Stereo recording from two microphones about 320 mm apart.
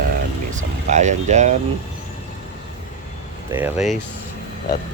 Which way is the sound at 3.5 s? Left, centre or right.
Centre.